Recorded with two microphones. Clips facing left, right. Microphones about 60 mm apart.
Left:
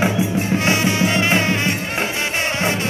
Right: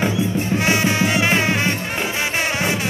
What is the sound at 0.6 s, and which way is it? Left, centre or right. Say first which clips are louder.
Music: right 1 dB; right.